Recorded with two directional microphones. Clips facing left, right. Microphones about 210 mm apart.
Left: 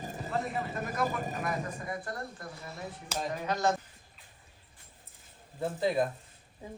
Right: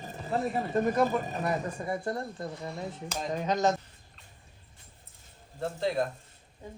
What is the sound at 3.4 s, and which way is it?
Speech, 15° right (ahead or behind).